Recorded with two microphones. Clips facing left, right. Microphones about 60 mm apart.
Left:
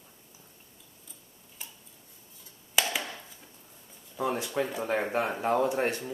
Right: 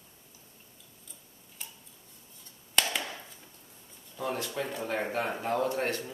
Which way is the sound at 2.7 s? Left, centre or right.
Centre.